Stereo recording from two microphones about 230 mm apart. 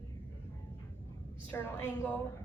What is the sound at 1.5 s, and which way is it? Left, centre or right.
Speech, centre.